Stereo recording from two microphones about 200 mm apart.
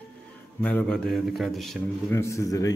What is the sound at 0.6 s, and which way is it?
A man's voice, 5° left (ahead or behind).